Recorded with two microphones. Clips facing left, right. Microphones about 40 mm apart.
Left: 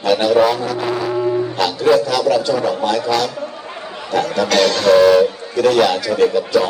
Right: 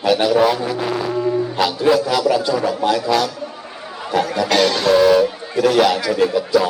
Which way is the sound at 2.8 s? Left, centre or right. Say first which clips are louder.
Even; centre.